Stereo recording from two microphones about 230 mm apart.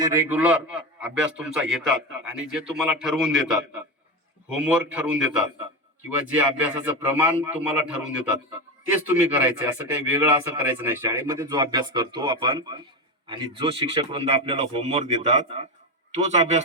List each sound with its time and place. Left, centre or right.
0.0 s a man's voice: centre
2.8 s a man's voice: centre; by 16.6 s right